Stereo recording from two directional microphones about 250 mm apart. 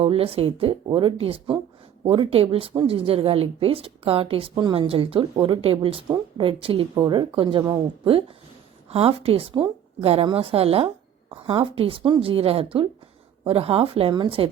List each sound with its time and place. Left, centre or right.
0.0 s speech: right